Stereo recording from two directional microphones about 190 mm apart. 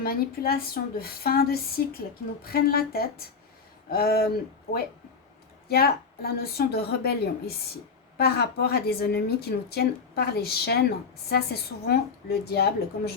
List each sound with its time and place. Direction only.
0.0 s a woman's voice: 50° left (ahead or behind)
5.6 s a woman's voice: 55° left (ahead or behind)